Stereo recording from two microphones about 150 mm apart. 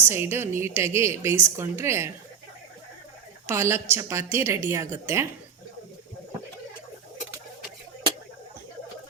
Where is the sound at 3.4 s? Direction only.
15° right (ahead or behind).